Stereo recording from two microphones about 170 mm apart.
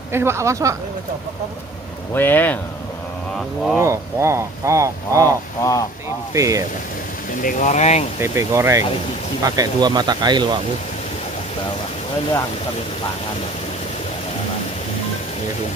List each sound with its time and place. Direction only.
0.1 s speech: 15° right (ahead or behind)
2.1 s speech: 10° left (ahead or behind)
3.7 s speech: 15° right (ahead or behind)
5.6 s speech: 20° left (ahead or behind)
6.3 s speech: 20° right (ahead or behind)
7.4 s speech: 50° left (ahead or behind)
8.2 s speech: 15° right (ahead or behind)